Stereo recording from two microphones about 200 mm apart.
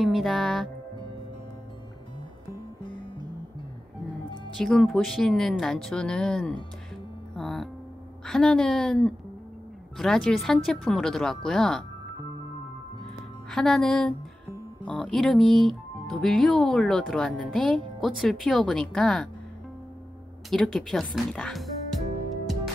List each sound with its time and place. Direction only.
0.0 s music: centre (ahead or behind)
4.6 s speech: centre (ahead or behind)
7.3 s music: centre (ahead or behind)
8.3 s speech: 5° left (ahead or behind)
13.5 s speech: 5° left (ahead or behind)
20.4 s speech: centre (ahead or behind)